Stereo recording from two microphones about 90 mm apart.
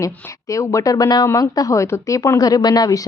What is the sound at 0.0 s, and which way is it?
A woman's voice, 35° left (ahead or behind).